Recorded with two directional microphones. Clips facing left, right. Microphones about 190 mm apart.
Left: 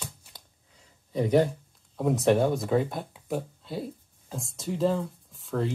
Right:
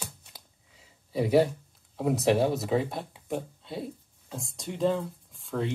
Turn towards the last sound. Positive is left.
turn(degrees=0)  # may be behind; listen again after turning